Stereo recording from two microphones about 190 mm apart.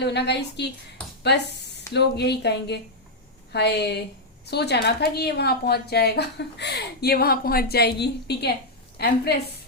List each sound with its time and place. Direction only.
0.0 s a woman's voice: 60° left (ahead or behind)